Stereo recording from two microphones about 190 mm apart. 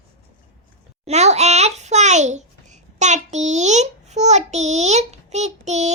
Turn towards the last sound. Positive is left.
turn(degrees=-35)  # may be behind; listen again after turning